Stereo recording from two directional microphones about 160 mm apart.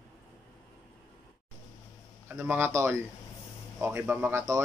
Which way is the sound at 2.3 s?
15° right (ahead or behind).